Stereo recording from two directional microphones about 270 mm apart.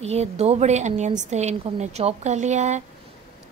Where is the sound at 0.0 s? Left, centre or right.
Right.